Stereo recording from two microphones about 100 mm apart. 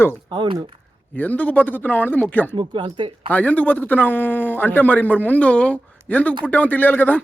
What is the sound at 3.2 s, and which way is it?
A man's voice, 15° left (ahead or behind).